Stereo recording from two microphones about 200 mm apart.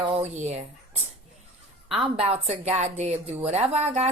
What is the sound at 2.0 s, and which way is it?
A woman's voice, 30° right (ahead or behind).